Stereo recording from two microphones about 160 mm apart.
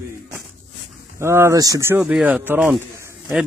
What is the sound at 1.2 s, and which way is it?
Speech, 15° right (ahead or behind).